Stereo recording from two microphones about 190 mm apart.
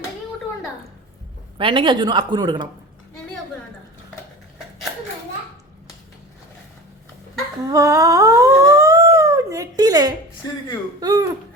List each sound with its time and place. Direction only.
1.5 s speech: 25° right (ahead or behind)
7.7 s dog: 15° right (ahead or behind)
11.0 s speech: 20° right (ahead or behind)